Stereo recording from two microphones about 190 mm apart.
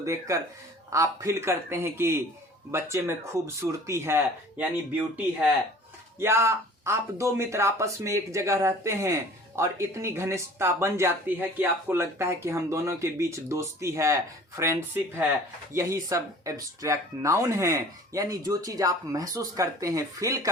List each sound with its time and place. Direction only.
0.0 s speech: 15° right (ahead or behind)
6.1 s speech: 15° right (ahead or behind)